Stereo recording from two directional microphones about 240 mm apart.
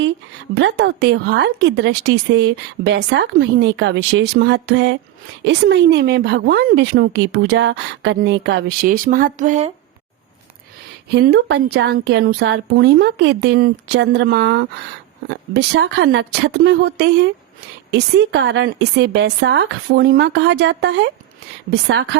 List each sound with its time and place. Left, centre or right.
0.6 s a woman's voice: right
11.1 s a woman's voice: right